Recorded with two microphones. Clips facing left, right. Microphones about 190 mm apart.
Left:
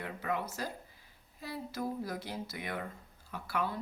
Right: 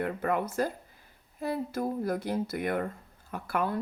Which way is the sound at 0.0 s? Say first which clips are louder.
Right 7 dB; 55° right (ahead or behind).